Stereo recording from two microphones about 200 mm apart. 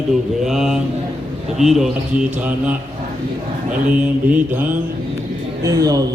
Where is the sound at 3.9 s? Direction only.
10° right (ahead or behind).